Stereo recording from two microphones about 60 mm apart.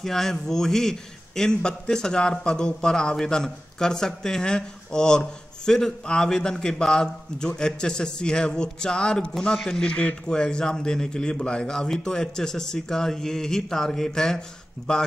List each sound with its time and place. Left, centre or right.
0.0 s a man's voice: centre